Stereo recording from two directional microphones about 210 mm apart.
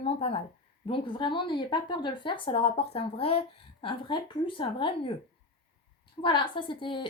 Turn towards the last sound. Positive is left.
turn(degrees=25)  # may be behind; listen again after turning